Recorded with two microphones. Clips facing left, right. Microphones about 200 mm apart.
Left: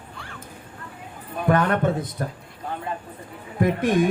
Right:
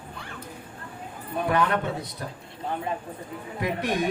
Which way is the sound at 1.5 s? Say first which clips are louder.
Left 5 dB; 50° left (ahead or behind).